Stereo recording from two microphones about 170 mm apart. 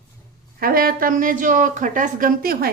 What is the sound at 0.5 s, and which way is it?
Speech, 60° right (ahead or behind).